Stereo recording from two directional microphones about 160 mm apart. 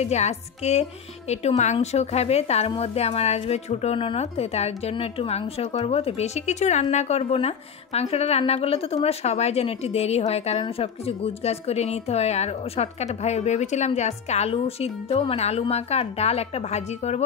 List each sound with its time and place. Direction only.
0.0 s a woman's voice: 45° left (ahead or behind)